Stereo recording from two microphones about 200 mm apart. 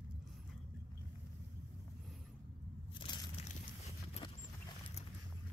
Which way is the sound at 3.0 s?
20° left (ahead or behind).